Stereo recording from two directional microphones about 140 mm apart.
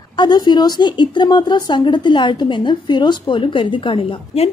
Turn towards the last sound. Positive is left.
turn(degrees=40)  # may be behind; listen again after turning